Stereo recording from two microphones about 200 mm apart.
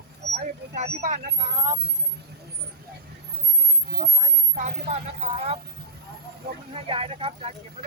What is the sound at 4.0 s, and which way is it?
Speech, 30° right (ahead or behind).